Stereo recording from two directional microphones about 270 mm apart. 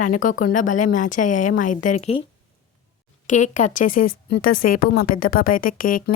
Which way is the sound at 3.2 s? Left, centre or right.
Left.